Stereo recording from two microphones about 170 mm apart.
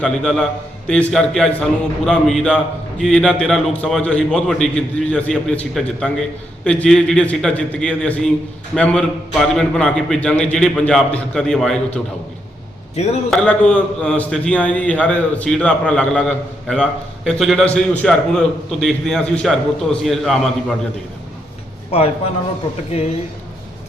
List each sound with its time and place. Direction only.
0.0 s a man's voice: 5° left (ahead or behind)
13.0 s speech: 40° left (ahead or behind)
13.3 s a man's voice: 5° left (ahead or behind)
21.8 s a man's voice: 35° left (ahead or behind)